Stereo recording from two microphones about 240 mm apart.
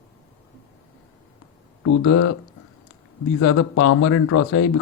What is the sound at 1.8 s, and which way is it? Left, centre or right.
Speech, left.